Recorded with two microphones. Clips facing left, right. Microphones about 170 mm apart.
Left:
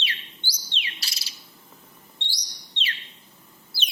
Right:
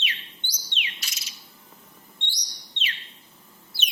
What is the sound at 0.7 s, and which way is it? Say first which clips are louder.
Bird: right 1 dB; 35° left (ahead or behind).